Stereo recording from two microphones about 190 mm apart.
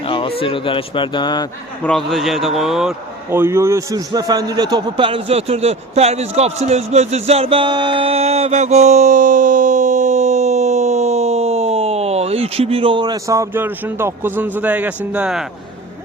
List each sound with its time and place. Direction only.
0.1 s a man's voice: 30° left (ahead or behind)
1.8 s a man's voice: 5° left (ahead or behind)
3.2 s a man's voice: 15° right (ahead or behind)